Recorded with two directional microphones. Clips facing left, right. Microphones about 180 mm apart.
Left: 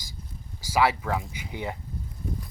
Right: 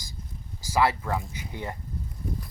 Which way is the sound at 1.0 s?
15° left (ahead or behind).